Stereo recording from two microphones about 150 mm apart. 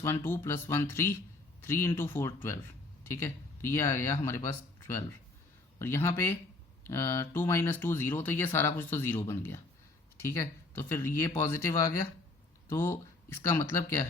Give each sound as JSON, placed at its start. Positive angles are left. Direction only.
{"t": 0.0, "sound": "speech", "side_deg": 15}
{"t": 5.8, "sound": "speech", "side_deg": 20}